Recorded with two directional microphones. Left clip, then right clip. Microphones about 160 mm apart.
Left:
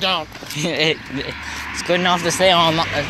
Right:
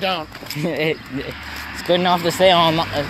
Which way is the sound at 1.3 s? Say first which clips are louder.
Left 3 dB; 25° right (ahead or behind).